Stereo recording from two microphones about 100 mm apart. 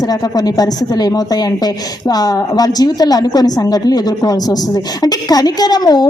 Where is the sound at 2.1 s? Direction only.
40° left (ahead or behind).